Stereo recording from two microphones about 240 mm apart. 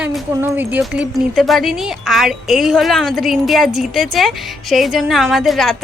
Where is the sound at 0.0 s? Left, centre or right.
Centre.